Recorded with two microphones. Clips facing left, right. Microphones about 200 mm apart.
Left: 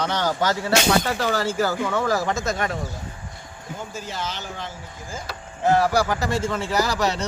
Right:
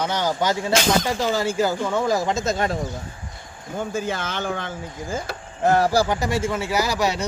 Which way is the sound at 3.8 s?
55° right (ahead or behind).